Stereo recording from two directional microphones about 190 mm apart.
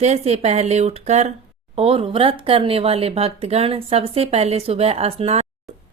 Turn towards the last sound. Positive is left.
turn(degrees=-30)  # may be behind; listen again after turning